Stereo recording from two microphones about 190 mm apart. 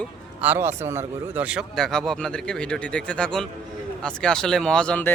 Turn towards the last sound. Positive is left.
turn(degrees=5)  # may be behind; listen again after turning